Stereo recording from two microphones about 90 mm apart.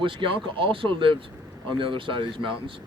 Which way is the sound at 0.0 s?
75° right (ahead or behind).